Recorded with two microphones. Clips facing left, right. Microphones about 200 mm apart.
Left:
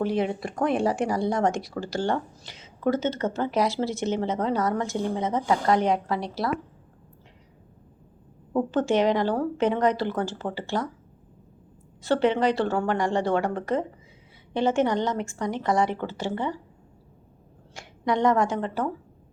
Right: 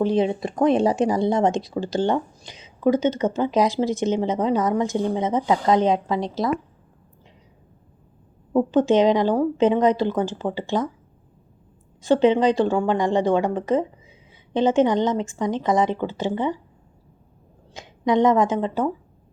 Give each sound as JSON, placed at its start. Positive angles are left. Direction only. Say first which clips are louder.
{"t": 0.0, "sound": "speech", "louder": "right 5 dB", "side_deg": -20}
{"t": 8.5, "sound": "a woman's voice", "louder": "right 5 dB", "side_deg": -15}
{"t": 12.0, "sound": "a woman's voice", "louder": "right 5 dB", "side_deg": -15}
{"t": 17.7, "sound": "speech", "louder": "right 6 dB", "side_deg": -20}